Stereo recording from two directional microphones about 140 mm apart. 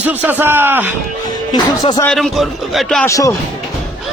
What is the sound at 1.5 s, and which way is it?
Speech, 30° left (ahead or behind).